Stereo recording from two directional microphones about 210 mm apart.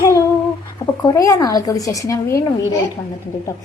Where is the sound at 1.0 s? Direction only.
15° left (ahead or behind).